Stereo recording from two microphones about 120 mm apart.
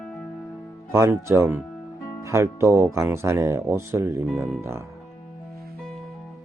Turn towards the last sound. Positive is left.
turn(degrees=-20)  # may be behind; listen again after turning